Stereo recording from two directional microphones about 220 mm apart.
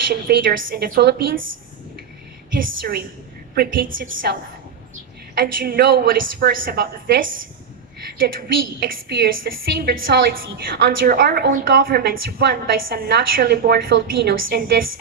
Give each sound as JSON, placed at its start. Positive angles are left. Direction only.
{"t": 0.1, "sound": "a woman's voice", "side_deg": -40}
{"t": 2.6, "sound": "a woman's voice", "side_deg": -40}
{"t": 5.3, "sound": "a woman's voice", "side_deg": -45}
{"t": 9.0, "sound": "a woman's voice", "side_deg": -50}